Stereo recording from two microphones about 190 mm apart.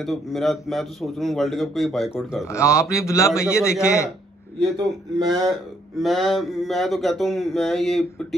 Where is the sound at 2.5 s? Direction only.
15° left (ahead or behind).